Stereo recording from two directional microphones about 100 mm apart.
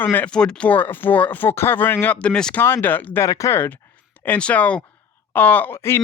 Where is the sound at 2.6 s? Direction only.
25° left (ahead or behind).